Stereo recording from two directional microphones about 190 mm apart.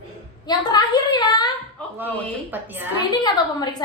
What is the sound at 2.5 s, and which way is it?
Speech, 10° right (ahead or behind).